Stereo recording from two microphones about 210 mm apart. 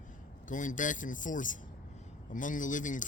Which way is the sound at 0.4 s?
40° left (ahead or behind).